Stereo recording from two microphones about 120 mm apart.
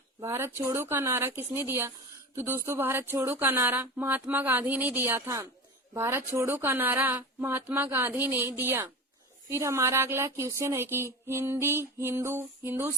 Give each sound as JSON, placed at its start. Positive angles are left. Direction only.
{"t": 0.2, "sound": "speech", "side_deg": -20}